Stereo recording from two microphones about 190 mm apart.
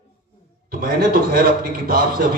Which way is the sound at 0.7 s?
50° right (ahead or behind).